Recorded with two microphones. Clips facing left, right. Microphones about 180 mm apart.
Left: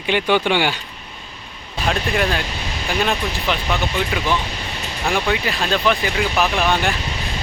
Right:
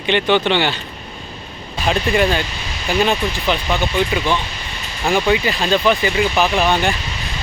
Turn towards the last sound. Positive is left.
turn(degrees=0)  # may be behind; listen again after turning